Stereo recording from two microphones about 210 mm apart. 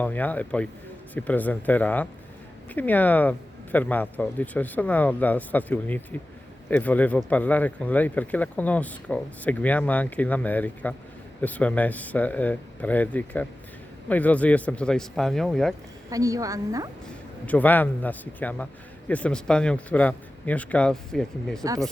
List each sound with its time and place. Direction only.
0.0 s speech: 10° left (ahead or behind)
16.0 s a woman's voice: 15° right (ahead or behind)
17.4 s speech: 5° left (ahead or behind)
21.6 s a woman's voice: 15° right (ahead or behind)